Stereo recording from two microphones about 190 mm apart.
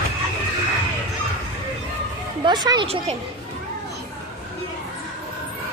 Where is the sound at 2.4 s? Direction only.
20° right (ahead or behind).